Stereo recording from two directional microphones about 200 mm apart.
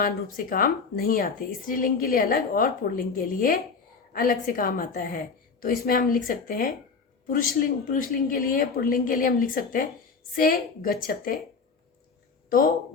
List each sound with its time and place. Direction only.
0.0 s speech: 45° left (ahead or behind)
12.5 s speech: 45° left (ahead or behind)